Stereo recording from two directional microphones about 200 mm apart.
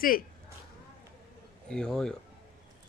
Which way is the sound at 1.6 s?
5° left (ahead or behind).